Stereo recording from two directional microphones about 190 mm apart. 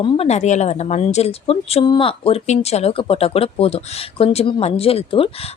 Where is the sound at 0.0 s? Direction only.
35° left (ahead or behind).